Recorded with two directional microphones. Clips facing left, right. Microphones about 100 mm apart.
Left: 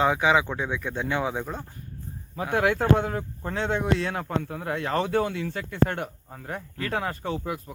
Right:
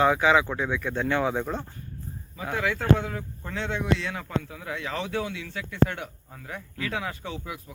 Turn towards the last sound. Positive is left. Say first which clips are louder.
# left 5 dB
turn(degrees=40)  # may be behind; listen again after turning